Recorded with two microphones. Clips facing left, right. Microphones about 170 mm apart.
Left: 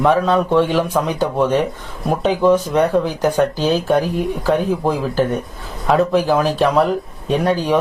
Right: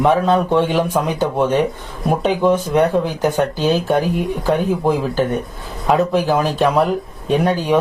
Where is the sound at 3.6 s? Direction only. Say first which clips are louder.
Even; centre (ahead or behind).